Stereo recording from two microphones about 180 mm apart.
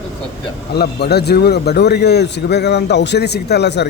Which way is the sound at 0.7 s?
60° left (ahead or behind).